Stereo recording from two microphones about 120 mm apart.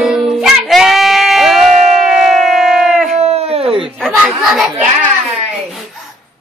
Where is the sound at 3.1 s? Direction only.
60° right (ahead or behind).